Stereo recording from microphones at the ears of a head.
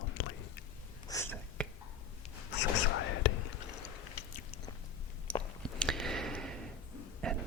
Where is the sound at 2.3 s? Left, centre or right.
Left.